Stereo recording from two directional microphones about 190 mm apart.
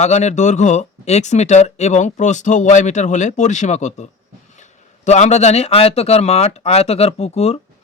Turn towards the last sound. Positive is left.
turn(degrees=35)  # may be behind; listen again after turning